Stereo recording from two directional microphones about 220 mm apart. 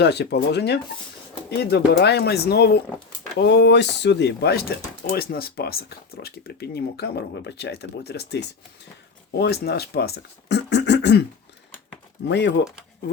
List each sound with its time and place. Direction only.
0.0 s speech: 50° left (ahead or behind)
12.3 s speech: 50° left (ahead or behind)